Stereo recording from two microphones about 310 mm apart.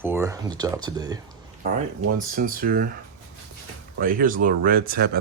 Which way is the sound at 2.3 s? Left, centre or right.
Right.